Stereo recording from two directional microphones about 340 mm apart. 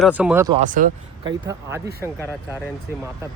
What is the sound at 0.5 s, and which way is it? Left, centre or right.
Speech, right.